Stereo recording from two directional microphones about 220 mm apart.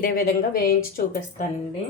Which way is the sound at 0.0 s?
45° left (ahead or behind).